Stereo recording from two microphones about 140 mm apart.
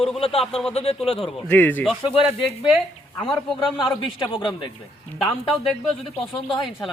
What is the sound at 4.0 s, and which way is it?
Speech, 35° left (ahead or behind).